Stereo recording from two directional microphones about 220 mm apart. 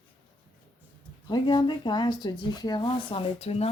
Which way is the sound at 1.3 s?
20° left (ahead or behind).